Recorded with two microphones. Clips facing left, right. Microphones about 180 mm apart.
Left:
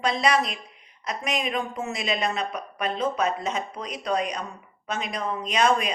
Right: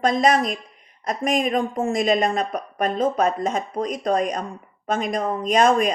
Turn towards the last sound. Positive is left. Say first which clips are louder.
# right 5 dB
turn(degrees=-45)  # may be behind; listen again after turning